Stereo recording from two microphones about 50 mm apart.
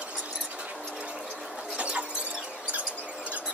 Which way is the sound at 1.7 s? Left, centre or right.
Right.